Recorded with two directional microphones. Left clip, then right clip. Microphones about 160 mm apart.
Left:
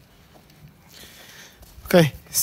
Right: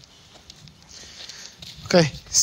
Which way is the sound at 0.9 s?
25° left (ahead or behind).